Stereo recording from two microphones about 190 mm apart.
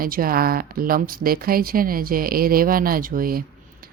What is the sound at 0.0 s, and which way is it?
Speech, 50° right (ahead or behind).